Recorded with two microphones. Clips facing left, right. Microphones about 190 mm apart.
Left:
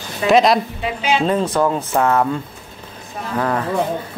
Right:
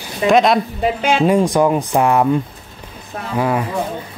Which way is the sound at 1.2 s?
15° right (ahead or behind).